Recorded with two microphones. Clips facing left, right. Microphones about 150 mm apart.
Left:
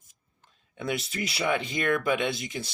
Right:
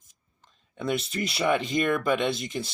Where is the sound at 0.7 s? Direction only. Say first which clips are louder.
Right 3 dB; 5° left (ahead or behind).